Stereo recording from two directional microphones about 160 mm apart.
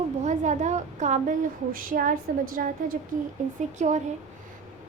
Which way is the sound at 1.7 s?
60° right (ahead or behind).